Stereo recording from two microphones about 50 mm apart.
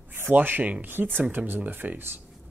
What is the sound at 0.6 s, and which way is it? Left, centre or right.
Speech, right.